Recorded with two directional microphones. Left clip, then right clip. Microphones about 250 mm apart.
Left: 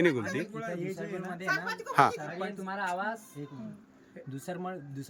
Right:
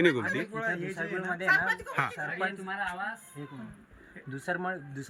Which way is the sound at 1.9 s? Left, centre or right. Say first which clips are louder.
Left 7 dB; left.